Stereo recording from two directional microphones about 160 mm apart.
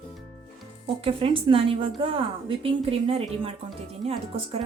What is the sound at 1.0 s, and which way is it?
A woman's voice, 35° right (ahead or behind).